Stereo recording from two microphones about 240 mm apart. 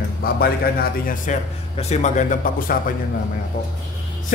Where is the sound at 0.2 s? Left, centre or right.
Left.